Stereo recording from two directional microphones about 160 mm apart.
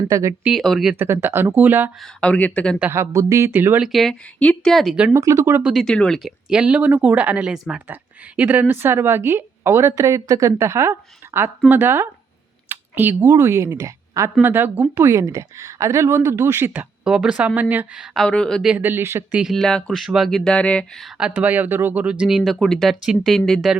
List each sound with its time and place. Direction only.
0.1 s speech: 20° right (ahead or behind)
0.4 s speech: centre (ahead or behind)
0.9 s a woman's voice: 15° right (ahead or behind)
2.0 s speech: 5° left (ahead or behind)
2.7 s a woman's voice: 10° right (ahead or behind)
3.8 s speech: centre (ahead or behind)
5.2 s speech: 20° right (ahead or behind)
5.6 s a woman's voice: centre (ahead or behind); by 19.4 s 15° right (ahead or behind)
19.4 s speech: centre (ahead or behind)